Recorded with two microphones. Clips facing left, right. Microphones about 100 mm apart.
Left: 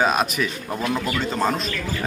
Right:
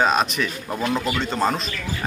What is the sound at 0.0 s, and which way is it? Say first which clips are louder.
Speech: right 1 dB; 5° left (ahead or behind).